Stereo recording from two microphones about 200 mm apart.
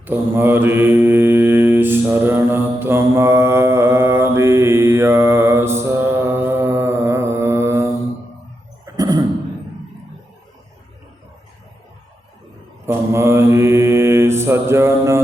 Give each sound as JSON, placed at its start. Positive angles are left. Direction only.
{"t": 0.0, "sound": "mantra", "side_deg": -10}
{"t": 9.0, "sound": "cough", "side_deg": -20}
{"t": 12.8, "sound": "mantra", "side_deg": -10}